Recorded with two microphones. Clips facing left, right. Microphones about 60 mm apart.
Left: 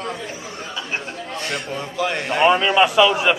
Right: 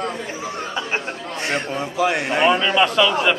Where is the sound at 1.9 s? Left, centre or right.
Centre.